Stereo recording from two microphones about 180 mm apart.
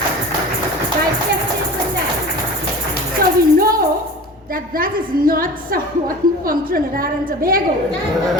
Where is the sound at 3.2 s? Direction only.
55° right (ahead or behind).